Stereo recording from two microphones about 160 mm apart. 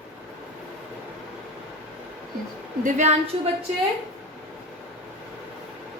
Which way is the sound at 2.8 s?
45° right (ahead or behind).